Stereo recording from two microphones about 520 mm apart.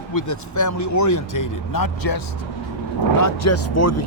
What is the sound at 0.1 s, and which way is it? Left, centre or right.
Speech, left.